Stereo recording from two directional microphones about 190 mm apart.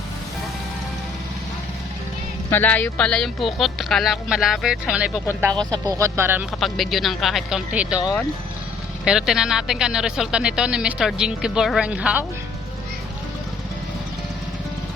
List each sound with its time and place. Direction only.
2.5 s speech: 10° left (ahead or behind)
5.7 s speech: 20° right (ahead or behind)
6.6 s speech: centre (ahead or behind)